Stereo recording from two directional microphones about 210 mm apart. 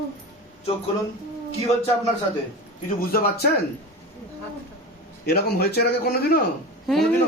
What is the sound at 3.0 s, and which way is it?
Speech, 45° left (ahead or behind).